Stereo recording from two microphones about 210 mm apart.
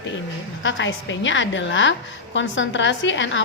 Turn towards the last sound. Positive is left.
turn(degrees=60)  # may be behind; listen again after turning